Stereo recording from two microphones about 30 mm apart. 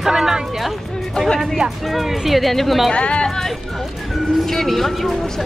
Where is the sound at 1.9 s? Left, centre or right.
Centre.